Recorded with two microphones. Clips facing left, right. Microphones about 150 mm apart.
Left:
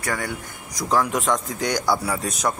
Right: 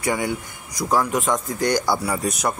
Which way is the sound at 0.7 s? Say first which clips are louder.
Right 1 dB; 5° right (ahead or behind).